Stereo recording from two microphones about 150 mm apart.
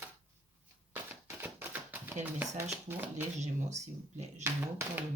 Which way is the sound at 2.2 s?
10° right (ahead or behind).